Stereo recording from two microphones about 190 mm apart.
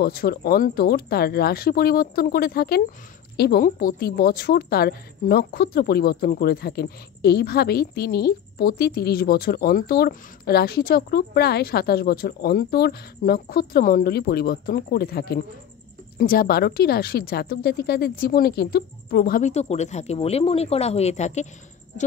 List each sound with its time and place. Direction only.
0.0 s a woman's voice: 55° left (ahead or behind); by 21.5 s 35° left (ahead or behind)